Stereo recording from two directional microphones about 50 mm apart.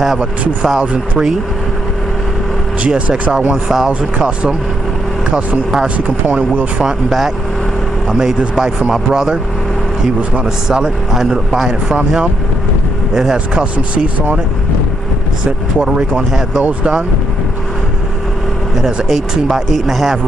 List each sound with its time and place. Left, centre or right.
0.7 s speech: centre
2.9 s speech: right
3.6 s speech: centre
5.9 s speech: right
6.8 s speech: centre
10.3 s speech: centre
11.1 s speech: centre
13.6 s speech: right
15.8 s speech: centre
19.3 s speech: centre